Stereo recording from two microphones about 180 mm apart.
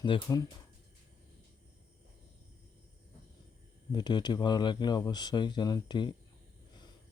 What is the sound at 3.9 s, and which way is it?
Speech, 25° left (ahead or behind).